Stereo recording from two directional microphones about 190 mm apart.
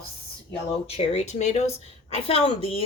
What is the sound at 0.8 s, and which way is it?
A woman's voice, 30° left (ahead or behind).